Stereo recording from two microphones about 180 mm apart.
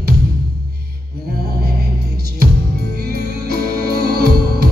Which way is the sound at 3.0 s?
55° right (ahead or behind).